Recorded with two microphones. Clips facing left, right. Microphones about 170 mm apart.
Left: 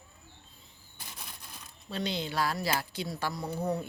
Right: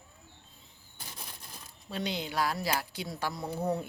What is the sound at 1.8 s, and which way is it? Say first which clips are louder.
Speech: left 1 dB; 10° right (ahead or behind).